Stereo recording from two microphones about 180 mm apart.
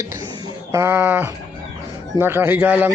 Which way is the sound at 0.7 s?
15° right (ahead or behind).